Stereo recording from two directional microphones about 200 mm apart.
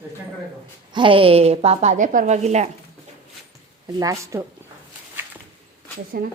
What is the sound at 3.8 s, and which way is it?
Speech, 15° right (ahead or behind).